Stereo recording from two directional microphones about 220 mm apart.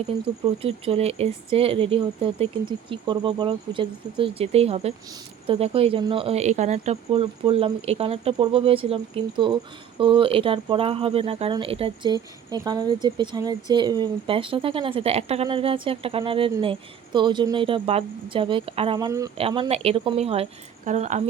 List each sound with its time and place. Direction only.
0.6 s speech: 25° right (ahead or behind)